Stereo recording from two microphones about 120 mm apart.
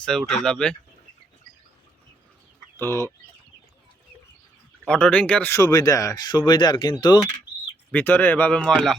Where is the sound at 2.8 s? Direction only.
20° left (ahead or behind).